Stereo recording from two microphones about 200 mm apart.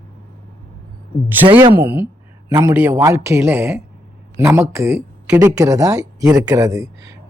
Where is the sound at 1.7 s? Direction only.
10° right (ahead or behind).